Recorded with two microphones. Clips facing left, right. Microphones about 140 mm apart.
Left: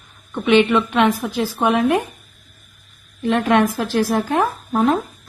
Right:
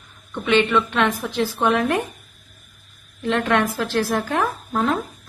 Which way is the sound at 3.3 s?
15° left (ahead or behind).